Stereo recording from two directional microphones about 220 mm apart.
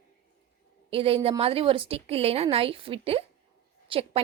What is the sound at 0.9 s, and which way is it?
A woman's voice, 25° right (ahead or behind).